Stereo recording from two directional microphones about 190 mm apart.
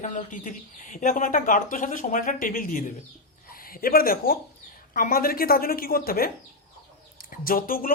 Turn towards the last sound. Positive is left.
turn(degrees=50)  # may be behind; listen again after turning